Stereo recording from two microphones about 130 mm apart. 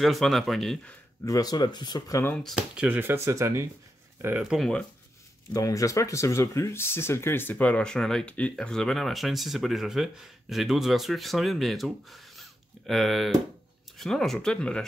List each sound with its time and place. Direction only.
0.0 s speech: centre (ahead or behind)
1.2 s speech: 30° left (ahead or behind)
2.3 s speech: 5° left (ahead or behind)
2.7 s speech: 10° right (ahead or behind)
4.4 s speech: 5° right (ahead or behind)
5.5 s speech: 25° left (ahead or behind); by 14.9 s 5° left (ahead or behind)